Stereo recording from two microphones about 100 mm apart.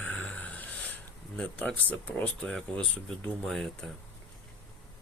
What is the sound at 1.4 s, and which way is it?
Speech, 15° left (ahead or behind).